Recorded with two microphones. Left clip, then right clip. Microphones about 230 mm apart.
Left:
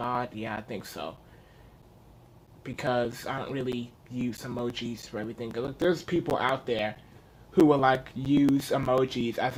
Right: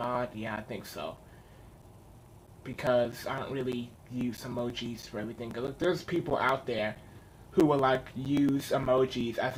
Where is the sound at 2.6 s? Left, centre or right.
Left.